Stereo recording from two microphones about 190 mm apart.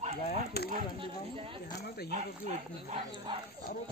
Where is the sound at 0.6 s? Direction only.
55° left (ahead or behind).